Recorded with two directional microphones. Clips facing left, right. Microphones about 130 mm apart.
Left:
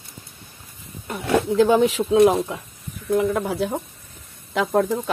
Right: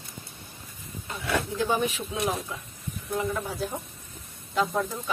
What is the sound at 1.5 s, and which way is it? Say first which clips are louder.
Speech: left 13 dB; 80° left.